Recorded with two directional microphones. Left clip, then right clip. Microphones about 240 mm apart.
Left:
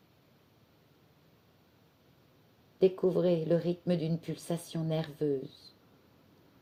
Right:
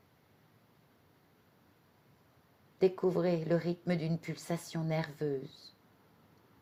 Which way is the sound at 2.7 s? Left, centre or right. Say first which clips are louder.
Left 3 dB; right.